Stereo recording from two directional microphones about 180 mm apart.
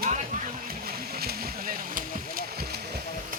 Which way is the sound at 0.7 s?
55° right (ahead or behind).